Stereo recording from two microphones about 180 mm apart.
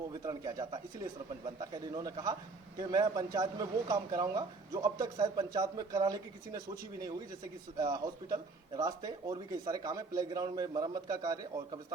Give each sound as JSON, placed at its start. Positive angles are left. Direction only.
{"t": 0.3, "sound": "a man's voice", "side_deg": -20}
{"t": 7.8, "sound": "a man's voice", "side_deg": -20}